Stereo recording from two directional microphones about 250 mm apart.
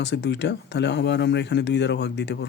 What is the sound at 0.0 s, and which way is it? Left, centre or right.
Speech, left.